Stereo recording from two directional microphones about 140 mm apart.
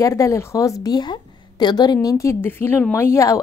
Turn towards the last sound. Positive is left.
turn(degrees=20)  # may be behind; listen again after turning